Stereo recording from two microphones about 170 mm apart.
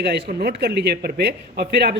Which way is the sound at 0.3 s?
60° right (ahead or behind).